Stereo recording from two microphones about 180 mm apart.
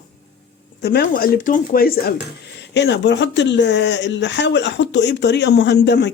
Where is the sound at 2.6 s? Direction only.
70° left (ahead or behind).